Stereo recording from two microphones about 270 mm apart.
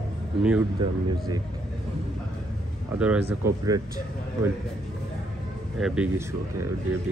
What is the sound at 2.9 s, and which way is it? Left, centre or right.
Speech, centre.